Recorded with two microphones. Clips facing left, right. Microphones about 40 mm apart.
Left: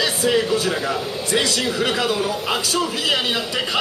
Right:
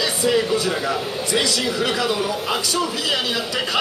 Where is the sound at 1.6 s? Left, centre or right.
Left.